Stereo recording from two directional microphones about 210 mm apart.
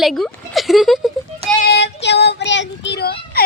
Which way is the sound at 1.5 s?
50° left (ahead or behind).